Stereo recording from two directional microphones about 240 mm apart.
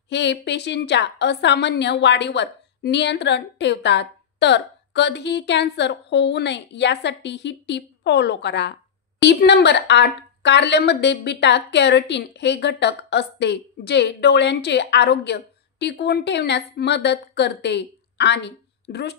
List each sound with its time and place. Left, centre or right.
0.1 s speech: left